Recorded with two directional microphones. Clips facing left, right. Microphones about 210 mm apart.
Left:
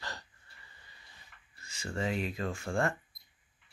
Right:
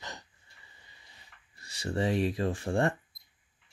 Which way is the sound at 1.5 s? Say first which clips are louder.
Right 5 dB; 35° right (ahead or behind).